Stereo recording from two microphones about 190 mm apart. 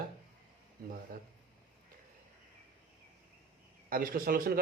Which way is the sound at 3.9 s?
50° right (ahead or behind).